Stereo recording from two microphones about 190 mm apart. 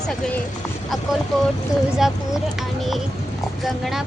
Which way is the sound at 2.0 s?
Centre (ahead or behind).